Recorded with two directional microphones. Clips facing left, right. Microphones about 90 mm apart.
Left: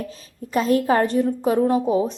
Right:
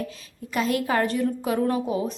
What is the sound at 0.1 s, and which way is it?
A woman's voice, 35° left (ahead or behind).